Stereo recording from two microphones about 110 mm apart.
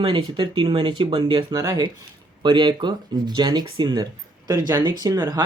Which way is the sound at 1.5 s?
35° right (ahead or behind).